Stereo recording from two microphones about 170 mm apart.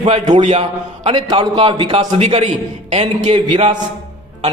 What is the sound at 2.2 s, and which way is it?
A man's voice, 40° right (ahead or behind).